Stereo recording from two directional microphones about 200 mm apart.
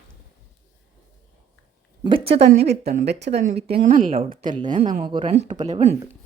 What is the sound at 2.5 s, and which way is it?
Speech, 55° right (ahead or behind).